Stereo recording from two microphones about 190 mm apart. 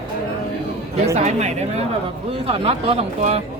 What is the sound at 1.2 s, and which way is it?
Speech, 35° right (ahead or behind).